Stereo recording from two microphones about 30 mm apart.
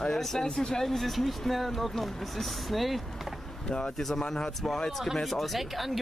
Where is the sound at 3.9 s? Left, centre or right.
Centre.